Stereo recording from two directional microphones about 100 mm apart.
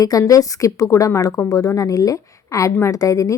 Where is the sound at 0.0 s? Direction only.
35° left (ahead or behind).